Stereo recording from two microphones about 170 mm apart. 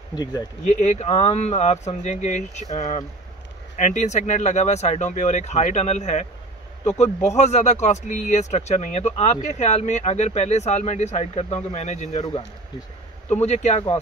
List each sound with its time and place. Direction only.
0.1 s speech: 25° left (ahead or behind)
0.7 s speech: 45° left (ahead or behind)